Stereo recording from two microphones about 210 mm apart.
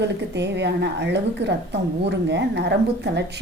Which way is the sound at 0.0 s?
55° right (ahead or behind).